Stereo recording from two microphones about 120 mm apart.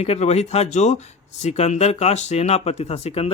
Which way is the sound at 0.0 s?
65° left (ahead or behind).